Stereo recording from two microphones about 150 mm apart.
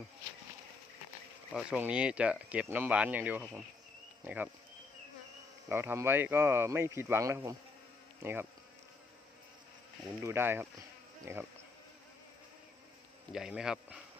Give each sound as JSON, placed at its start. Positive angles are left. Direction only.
{"t": 1.5, "sound": "speech", "side_deg": -10}
{"t": 5.6, "sound": "speech", "side_deg": -15}
{"t": 10.2, "sound": "speech", "side_deg": -15}
{"t": 13.3, "sound": "speech", "side_deg": -5}